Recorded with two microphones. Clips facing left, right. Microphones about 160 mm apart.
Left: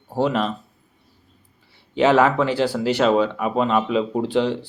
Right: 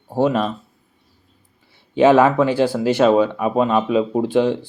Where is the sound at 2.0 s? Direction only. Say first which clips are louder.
Right 4 dB; 15° right (ahead or behind).